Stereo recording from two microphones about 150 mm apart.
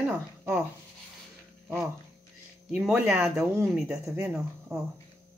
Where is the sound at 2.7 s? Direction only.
5° right (ahead or behind).